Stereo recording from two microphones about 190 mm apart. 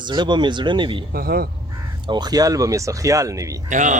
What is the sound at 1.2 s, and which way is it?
Speech, 50° right (ahead or behind).